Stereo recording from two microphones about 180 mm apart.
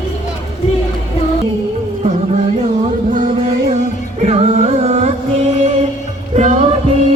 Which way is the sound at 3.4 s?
35° right (ahead or behind).